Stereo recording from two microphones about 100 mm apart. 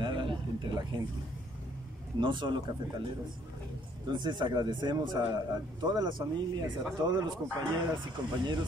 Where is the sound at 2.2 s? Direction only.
50° right (ahead or behind).